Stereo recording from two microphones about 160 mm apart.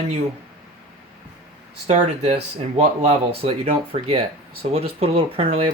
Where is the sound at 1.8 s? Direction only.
45° right (ahead or behind).